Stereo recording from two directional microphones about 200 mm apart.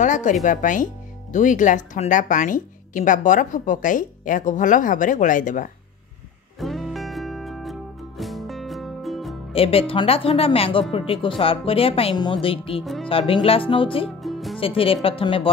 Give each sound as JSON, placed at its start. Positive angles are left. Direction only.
{"t": 0.0, "sound": "speech", "side_deg": 40}
{"t": 6.6, "sound": "music", "side_deg": 0}
{"t": 9.5, "sound": "speech", "side_deg": 30}
{"t": 12.8, "sound": "speech", "side_deg": 0}
{"t": 13.1, "sound": "speech", "side_deg": 30}
{"t": 14.2, "sound": "music", "side_deg": 0}
{"t": 14.6, "sound": "speech", "side_deg": 30}